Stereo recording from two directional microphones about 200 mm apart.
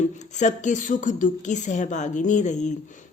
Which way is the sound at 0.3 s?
35° left (ahead or behind).